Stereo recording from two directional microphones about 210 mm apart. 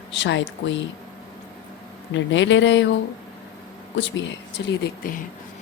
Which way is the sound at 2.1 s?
60° left (ahead or behind).